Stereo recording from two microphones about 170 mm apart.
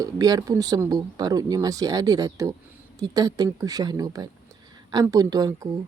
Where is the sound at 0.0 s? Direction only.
20° right (ahead or behind).